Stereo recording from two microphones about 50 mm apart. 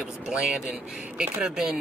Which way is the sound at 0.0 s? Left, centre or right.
Centre.